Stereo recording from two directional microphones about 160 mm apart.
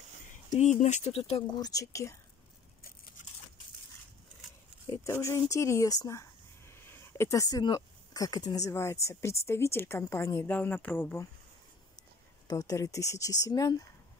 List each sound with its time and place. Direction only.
0.6 s speech: 50° left (ahead or behind)
1.6 s speech: 20° left (ahead or behind)
5.0 s speech: 20° left (ahead or behind)
12.4 s speech: 20° left (ahead or behind)